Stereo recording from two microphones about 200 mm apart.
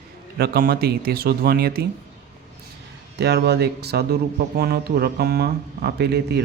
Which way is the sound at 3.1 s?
55° right (ahead or behind).